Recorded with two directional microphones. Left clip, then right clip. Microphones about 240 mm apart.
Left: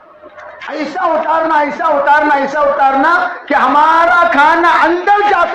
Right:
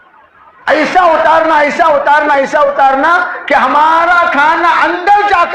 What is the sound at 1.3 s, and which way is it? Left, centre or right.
A man's voice, right.